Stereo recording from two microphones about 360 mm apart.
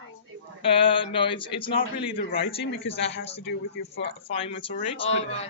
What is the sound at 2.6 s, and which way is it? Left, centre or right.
Speech, left.